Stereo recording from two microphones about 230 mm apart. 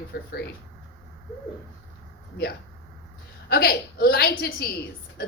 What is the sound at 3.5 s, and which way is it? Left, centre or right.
A woman's voice, left.